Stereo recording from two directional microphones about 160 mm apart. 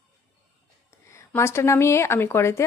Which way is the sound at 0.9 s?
15° left (ahead or behind).